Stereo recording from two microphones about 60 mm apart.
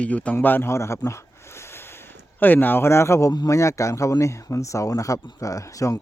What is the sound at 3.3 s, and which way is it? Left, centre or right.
Speech, left.